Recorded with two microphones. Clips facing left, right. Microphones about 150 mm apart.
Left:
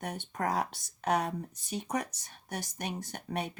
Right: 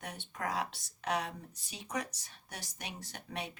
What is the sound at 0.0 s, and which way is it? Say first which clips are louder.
Speech: left 6 dB; 45° left (ahead or behind).